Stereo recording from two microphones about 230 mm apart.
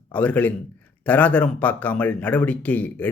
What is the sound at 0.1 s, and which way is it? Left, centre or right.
A man's voice, centre.